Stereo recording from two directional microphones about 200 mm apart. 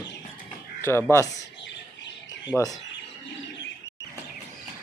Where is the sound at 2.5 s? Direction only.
15° left (ahead or behind).